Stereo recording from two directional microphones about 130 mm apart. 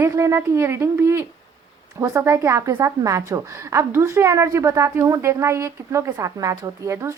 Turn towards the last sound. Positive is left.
turn(degrees=-25)  # may be behind; listen again after turning